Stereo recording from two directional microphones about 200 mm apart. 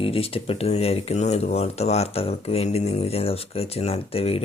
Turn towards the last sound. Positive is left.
turn(degrees=30)  # may be behind; listen again after turning